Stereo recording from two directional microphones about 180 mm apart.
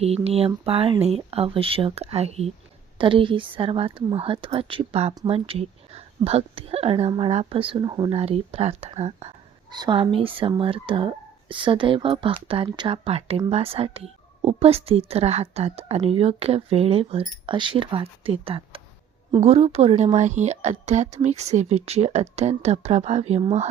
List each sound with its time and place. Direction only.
0.0 s speech: 35° right (ahead or behind)
9.7 s speech: 25° right (ahead or behind)